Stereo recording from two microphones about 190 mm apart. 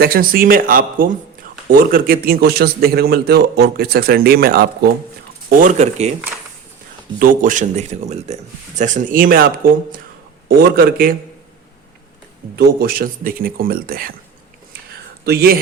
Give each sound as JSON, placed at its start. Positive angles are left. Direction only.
{"t": 0.0, "sound": "a man's voice", "side_deg": -50}
{"t": 7.2, "sound": "a man's voice", "side_deg": -45}
{"t": 12.5, "sound": "a man's voice", "side_deg": -50}
{"t": 15.2, "sound": "speech", "side_deg": -55}